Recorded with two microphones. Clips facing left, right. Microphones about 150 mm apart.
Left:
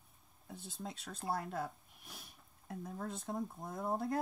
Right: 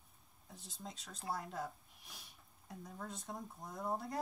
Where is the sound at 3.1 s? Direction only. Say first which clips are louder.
Left 8 dB; centre (ahead or behind).